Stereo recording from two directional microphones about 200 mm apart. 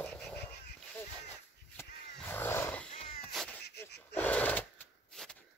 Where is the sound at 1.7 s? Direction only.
10° left (ahead or behind).